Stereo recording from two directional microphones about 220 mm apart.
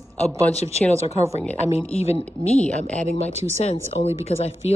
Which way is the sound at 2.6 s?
5° left (ahead or behind).